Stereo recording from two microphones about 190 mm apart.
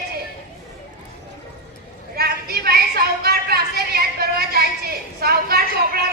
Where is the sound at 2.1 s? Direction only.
55° right (ahead or behind).